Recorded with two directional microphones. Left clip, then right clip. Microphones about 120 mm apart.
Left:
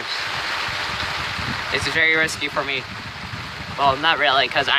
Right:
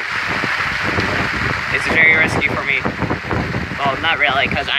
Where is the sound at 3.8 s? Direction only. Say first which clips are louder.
Right 1 dB; 30° left (ahead or behind).